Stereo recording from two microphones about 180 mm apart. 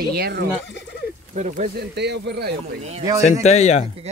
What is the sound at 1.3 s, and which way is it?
Speech, 40° right (ahead or behind).